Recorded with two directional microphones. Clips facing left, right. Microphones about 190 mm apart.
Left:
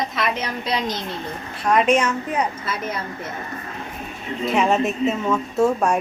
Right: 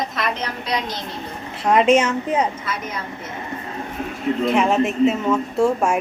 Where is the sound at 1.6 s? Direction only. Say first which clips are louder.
Right 2 dB; 25° right (ahead or behind).